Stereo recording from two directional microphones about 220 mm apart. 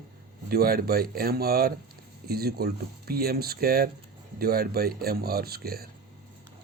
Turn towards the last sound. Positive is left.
turn(degrees=-45)  # may be behind; listen again after turning